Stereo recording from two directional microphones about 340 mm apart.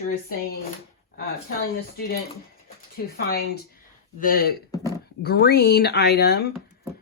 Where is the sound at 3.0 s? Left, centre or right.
Left.